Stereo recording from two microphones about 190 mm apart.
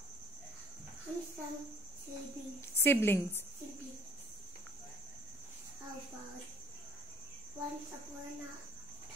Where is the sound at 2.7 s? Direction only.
10° left (ahead or behind).